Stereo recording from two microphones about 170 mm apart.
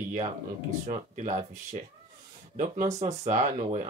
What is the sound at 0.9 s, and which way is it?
Speech, 45° right (ahead or behind).